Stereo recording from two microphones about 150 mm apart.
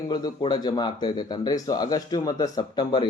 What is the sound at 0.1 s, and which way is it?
Speech, 30° left (ahead or behind).